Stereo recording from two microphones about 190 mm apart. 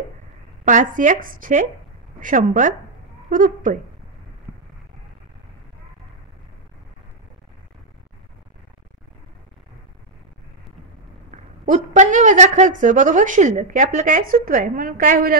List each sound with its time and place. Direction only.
0.7 s a woman's voice: 40° right (ahead or behind)
11.6 s a woman's voice: 40° right (ahead or behind)